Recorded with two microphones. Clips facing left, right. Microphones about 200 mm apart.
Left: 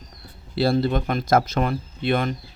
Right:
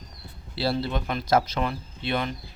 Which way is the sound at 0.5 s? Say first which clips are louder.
Left 6 dB; 50° left (ahead or behind).